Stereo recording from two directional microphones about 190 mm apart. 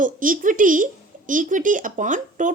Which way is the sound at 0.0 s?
45° right (ahead or behind).